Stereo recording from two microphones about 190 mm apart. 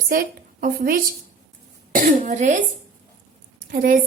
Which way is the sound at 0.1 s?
50° right (ahead or behind).